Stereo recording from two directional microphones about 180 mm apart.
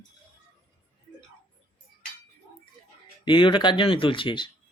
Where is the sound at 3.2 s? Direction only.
25° left (ahead or behind).